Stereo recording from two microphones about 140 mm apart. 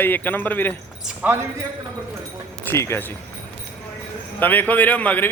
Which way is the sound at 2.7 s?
20° left (ahead or behind).